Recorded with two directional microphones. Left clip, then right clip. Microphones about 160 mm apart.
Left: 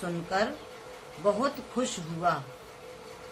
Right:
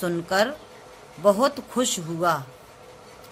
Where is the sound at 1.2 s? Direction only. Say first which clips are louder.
Right 8 dB; 90° right.